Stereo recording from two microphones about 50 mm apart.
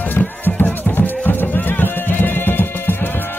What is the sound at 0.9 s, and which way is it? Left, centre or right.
Music, left.